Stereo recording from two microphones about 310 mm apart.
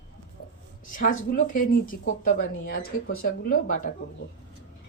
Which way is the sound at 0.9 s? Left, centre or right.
Left.